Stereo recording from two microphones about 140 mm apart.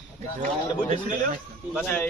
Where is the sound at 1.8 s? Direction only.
10° left (ahead or behind).